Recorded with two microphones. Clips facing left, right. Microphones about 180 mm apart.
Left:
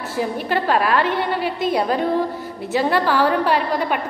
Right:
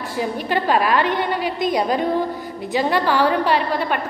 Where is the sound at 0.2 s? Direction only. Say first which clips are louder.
Even; centre (ahead or behind).